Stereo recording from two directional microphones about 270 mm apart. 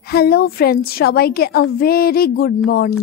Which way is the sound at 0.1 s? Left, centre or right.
Left.